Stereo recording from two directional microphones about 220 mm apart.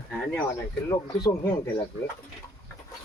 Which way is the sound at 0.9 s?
20° left (ahead or behind).